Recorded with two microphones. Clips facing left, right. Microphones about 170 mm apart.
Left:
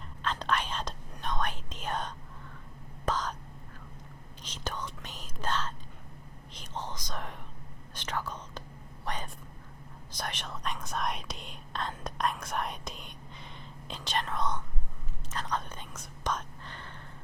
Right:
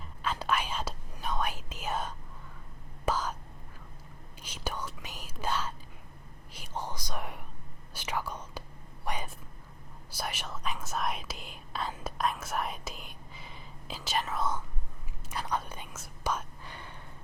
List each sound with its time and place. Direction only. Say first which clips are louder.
0.2 s whispering: even; 10° right (ahead or behind)
4.4 s speech: right 1 dB; 10° right (ahead or behind)
9.0 s whispering: right 1 dB; 10° right (ahead or behind)
10.1 s speech: right 1 dB; 5° right (ahead or behind)
15.3 s whispering: right 1 dB; 10° right (ahead or behind)